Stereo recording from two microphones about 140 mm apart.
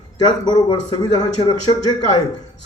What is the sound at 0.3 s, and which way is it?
A man's voice, 30° left (ahead or behind).